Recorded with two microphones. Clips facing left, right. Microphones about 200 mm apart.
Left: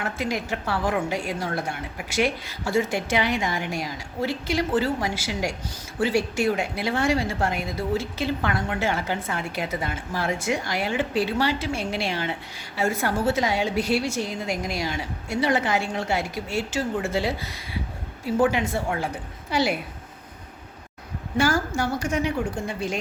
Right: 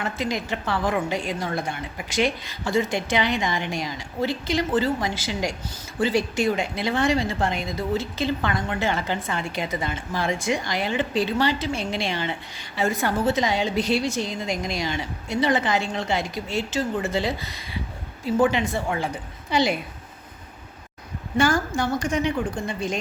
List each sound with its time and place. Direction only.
0.0 s a woman's voice: 10° left (ahead or behind)
21.3 s speech: 10° left (ahead or behind)